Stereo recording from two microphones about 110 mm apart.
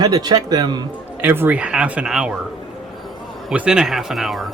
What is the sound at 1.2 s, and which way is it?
Speech, 20° right (ahead or behind).